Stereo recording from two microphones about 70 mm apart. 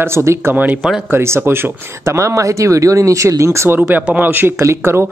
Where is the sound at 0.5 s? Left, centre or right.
Right.